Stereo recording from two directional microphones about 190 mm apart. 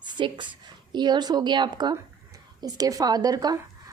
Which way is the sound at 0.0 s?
25° right (ahead or behind).